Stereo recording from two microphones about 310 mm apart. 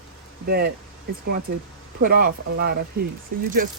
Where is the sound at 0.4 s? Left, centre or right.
Right.